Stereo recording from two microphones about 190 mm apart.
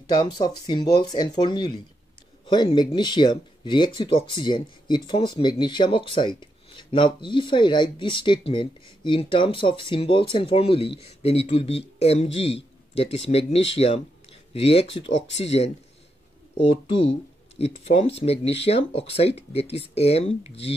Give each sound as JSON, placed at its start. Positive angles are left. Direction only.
{"t": 0.0, "sound": "speech", "side_deg": 20}